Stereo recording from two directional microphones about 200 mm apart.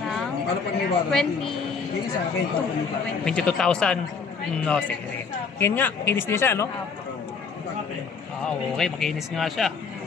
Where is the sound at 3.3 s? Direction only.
5° left (ahead or behind).